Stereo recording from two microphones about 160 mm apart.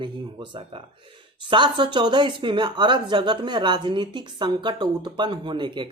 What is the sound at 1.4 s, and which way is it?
Speech, 30° right (ahead or behind).